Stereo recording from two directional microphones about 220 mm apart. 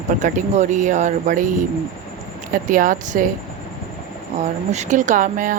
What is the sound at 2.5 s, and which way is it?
Speech, 35° right (ahead or behind).